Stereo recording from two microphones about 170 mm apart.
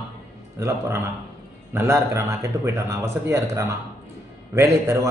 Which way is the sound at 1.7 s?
15° right (ahead or behind).